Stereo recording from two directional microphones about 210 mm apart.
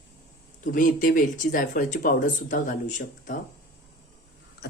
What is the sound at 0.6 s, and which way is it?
Speech, 40° left (ahead or behind).